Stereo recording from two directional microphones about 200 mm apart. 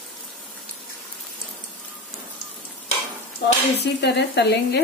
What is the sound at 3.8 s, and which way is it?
Frying, 60° left (ahead or behind).